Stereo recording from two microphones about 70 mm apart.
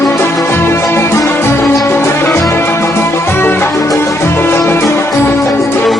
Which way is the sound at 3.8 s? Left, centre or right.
Left.